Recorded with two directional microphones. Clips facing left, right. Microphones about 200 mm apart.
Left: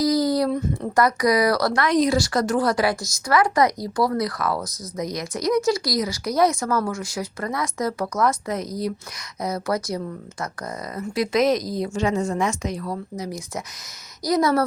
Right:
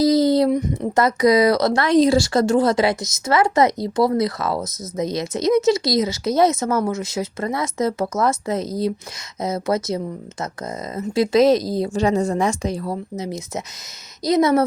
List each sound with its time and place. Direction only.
0.0 s speech: 25° right (ahead or behind)